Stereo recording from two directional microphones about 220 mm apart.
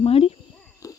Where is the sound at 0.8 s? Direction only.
15° left (ahead or behind).